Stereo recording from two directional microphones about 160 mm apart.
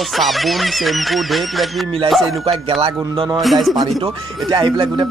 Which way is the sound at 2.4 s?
35° right (ahead or behind).